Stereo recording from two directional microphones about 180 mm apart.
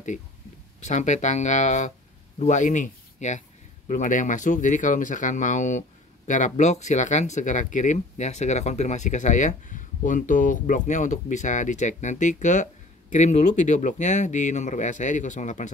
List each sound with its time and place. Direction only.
0.7 s speech: 40° left (ahead or behind)